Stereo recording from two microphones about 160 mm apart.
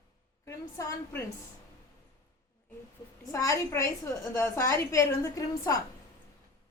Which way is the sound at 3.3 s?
20° left (ahead or behind).